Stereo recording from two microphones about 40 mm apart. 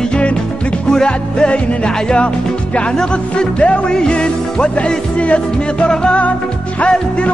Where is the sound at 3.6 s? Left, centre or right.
Left.